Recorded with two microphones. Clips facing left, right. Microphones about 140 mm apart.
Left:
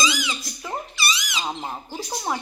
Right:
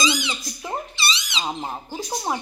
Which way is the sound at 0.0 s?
30° right (ahead or behind).